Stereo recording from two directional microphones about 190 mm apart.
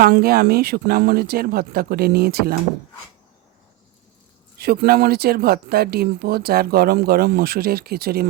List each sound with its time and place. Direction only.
0.0 s speech: 55° right (ahead or behind)
4.5 s speech: 55° right (ahead or behind)